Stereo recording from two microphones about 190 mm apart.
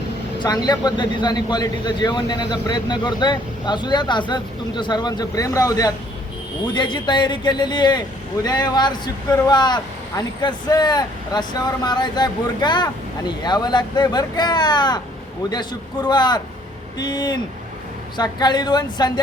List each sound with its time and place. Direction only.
0.3 s a man's voice: 20° left (ahead or behind)
16.0 s a man's voice: 20° left (ahead or behind)